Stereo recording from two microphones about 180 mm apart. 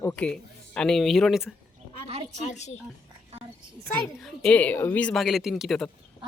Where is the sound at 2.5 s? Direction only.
40° left (ahead or behind).